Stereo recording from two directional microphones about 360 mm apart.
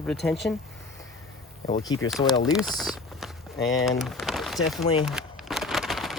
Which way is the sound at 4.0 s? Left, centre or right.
Centre.